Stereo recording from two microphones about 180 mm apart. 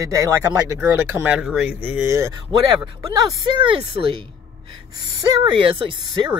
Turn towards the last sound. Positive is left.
turn(degrees=-30)  # may be behind; listen again after turning